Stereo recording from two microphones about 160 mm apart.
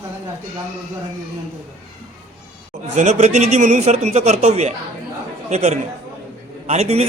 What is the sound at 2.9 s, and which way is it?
A man's voice, 45° right (ahead or behind).